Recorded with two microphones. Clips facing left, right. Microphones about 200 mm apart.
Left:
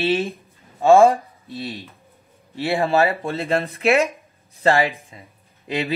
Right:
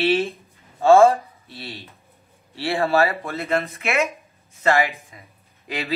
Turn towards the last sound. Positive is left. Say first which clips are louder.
# left 5 dB
turn(degrees=25)  # may be behind; listen again after turning